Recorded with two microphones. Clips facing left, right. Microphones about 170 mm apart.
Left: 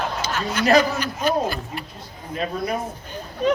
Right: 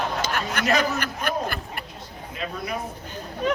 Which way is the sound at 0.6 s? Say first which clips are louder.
Left 6 dB; 60° right (ahead or behind).